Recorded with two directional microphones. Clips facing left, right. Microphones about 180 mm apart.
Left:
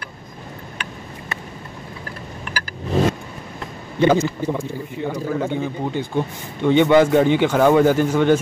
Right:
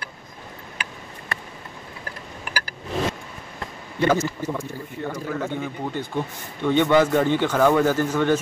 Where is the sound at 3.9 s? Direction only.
30° left (ahead or behind).